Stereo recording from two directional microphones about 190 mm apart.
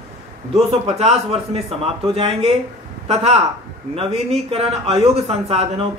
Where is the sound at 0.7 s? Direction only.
35° right (ahead or behind).